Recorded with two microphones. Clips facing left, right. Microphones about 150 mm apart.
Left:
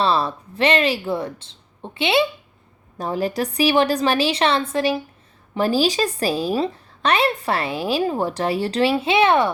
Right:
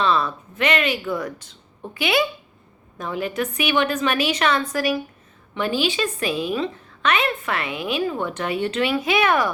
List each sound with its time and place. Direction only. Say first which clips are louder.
0.0 s a woman's voice: left 1 dB; 35° left (ahead or behind)